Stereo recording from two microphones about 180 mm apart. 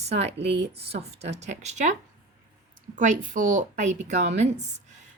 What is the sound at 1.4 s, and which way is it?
A woman's voice, 40° right (ahead or behind).